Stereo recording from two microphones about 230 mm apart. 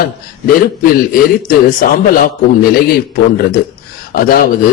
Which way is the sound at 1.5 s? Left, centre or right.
Left.